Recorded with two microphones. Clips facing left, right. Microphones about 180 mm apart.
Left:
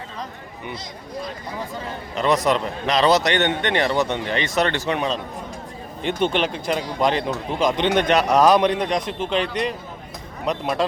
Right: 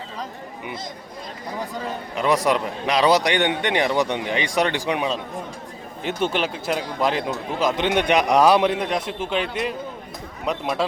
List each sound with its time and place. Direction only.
2.1 s a man's voice: 10° right (ahead or behind)